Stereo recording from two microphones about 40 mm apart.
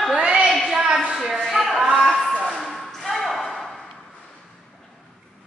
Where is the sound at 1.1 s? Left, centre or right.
Centre.